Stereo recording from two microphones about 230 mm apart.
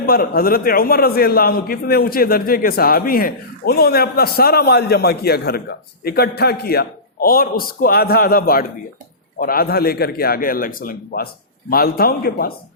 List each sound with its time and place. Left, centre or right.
0.0 s a man's voice: left